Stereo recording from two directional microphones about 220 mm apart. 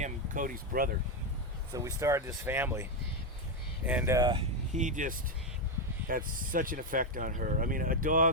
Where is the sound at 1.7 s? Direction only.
15° right (ahead or behind).